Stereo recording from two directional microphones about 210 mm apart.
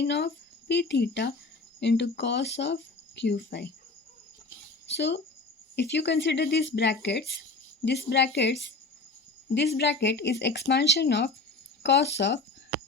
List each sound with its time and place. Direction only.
0.0 s speech: 55° left (ahead or behind)
4.4 s a sound: 55° left (ahead or behind)
5.7 s speech: 55° left (ahead or behind)
9.6 s speech: 55° left (ahead or behind)